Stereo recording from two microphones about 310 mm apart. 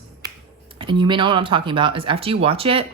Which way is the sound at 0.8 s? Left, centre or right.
Centre.